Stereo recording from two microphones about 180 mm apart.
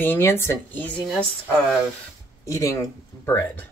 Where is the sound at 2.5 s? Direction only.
15° left (ahead or behind).